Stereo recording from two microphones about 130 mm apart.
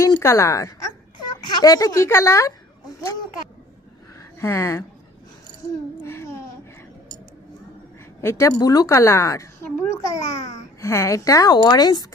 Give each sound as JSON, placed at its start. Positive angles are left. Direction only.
{"t": 0.0, "sound": "a woman's voice", "side_deg": 25}
{"t": 4.4, "sound": "speech", "side_deg": 20}
{"t": 6.0, "sound": "a sound", "side_deg": 20}
{"t": 8.2, "sound": "a woman's voice", "side_deg": 20}